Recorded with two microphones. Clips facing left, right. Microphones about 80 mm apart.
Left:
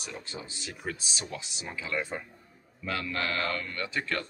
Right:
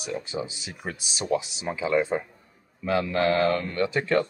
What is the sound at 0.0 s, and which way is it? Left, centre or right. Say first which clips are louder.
A man's voice: right 10 dB; centre.